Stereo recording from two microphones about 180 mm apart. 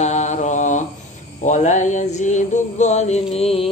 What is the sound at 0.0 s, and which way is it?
Mantra, 40° left (ahead or behind).